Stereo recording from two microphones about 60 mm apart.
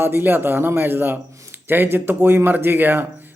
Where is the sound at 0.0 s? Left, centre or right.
Right.